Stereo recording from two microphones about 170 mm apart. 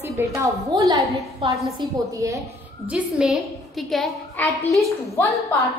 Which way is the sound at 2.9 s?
Centre (ahead or behind).